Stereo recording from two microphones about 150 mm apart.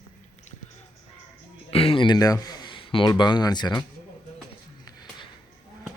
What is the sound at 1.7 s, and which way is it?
Speech, 40° left (ahead or behind).